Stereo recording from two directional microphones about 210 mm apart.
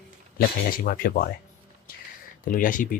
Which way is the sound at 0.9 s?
45° left (ahead or behind).